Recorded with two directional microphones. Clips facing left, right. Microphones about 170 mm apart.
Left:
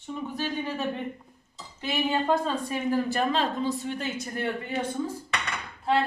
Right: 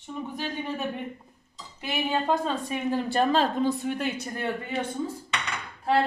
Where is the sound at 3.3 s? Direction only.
55° right (ahead or behind).